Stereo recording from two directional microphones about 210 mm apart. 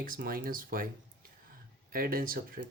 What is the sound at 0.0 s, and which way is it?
Speech, 40° right (ahead or behind).